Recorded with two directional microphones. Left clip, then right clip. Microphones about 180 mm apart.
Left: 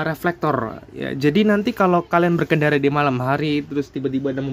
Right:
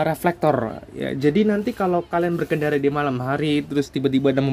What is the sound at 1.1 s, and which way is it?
Speech, 10° left (ahead or behind).